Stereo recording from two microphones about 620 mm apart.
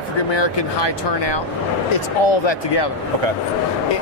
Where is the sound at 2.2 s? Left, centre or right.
Left.